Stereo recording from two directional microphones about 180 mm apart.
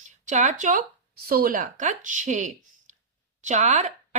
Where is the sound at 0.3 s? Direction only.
45° right (ahead or behind).